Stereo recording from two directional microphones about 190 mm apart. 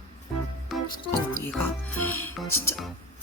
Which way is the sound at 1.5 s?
10° left (ahead or behind).